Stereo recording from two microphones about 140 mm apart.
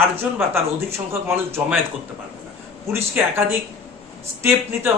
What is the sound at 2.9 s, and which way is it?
Speech, 15° right (ahead or behind).